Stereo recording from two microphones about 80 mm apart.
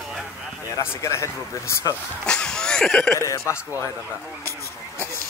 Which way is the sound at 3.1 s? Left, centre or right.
Left.